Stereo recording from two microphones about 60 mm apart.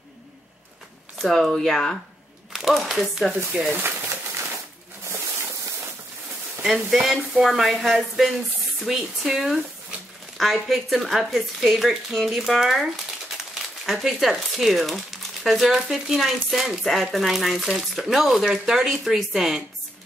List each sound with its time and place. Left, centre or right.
1.2 s speech: centre
3.7 s a sound: right
6.6 s speech: centre